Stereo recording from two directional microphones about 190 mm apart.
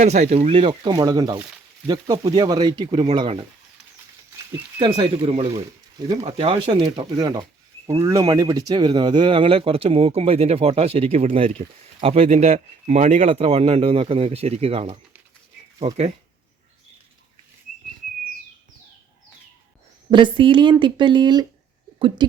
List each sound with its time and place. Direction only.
0.0 s speech: 35° right (ahead or behind)
4.8 s speech: 25° right (ahead or behind)
5.5 s speech: 20° right (ahead or behind)
6.2 s speech: 30° right (ahead or behind)
20.1 s speech: 25° right (ahead or behind)